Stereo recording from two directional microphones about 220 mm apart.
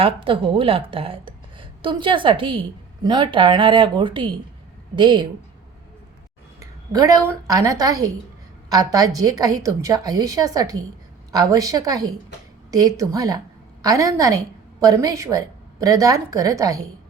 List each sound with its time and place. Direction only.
0.0 s a woman's voice: 25° right (ahead or behind)
6.6 s a woman's voice: 15° right (ahead or behind)